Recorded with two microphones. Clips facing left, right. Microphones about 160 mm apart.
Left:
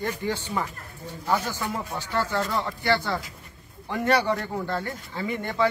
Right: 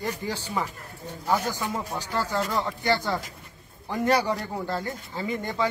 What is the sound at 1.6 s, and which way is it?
Speech, 15° right (ahead or behind).